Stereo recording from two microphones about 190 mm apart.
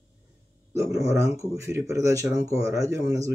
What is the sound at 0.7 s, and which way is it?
Speech, 15° right (ahead or behind).